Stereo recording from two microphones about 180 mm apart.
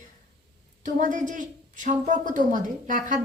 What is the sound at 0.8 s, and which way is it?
A woman's voice, 45° right (ahead or behind).